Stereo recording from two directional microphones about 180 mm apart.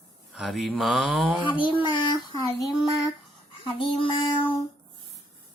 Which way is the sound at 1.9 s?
25° left (ahead or behind).